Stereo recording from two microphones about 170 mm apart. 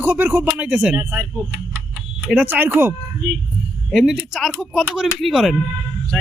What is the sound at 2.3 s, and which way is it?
Speech, 10° right (ahead or behind).